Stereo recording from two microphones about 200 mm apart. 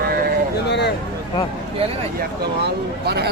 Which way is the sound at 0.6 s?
60° left (ahead or behind).